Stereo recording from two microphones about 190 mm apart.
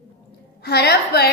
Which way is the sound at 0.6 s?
60° left (ahead or behind).